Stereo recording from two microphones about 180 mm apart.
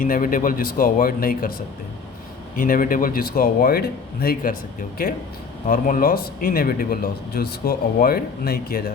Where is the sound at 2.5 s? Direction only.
50° left (ahead or behind).